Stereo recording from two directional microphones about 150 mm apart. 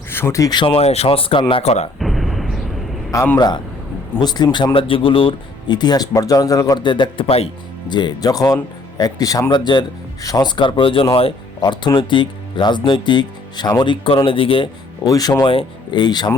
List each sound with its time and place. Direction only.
0.1 s speech: 15° left (ahead or behind)
0.6 s speech: 40° left (ahead or behind)
2.0 s artillery fire: centre (ahead or behind)
3.3 s speech: 30° left (ahead or behind)
7.9 s speech: 30° left (ahead or behind)
15.0 s speech: 25° left (ahead or behind)